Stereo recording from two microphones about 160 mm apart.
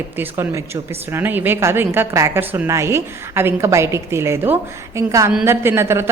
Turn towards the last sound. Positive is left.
turn(degrees=-15)  # may be behind; listen again after turning